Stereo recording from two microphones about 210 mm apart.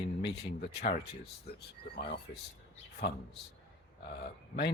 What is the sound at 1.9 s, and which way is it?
Speech, 50° left (ahead or behind).